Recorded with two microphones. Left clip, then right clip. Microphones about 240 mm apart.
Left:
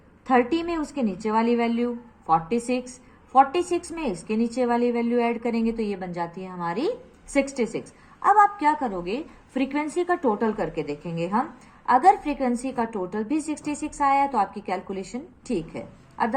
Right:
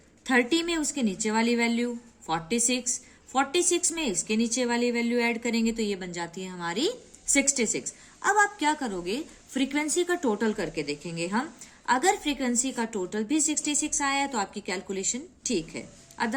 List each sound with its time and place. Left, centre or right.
0.5 s a woman's voice: right